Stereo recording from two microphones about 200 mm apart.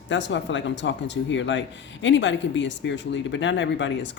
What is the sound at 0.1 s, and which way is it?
Speech, 65° left (ahead or behind).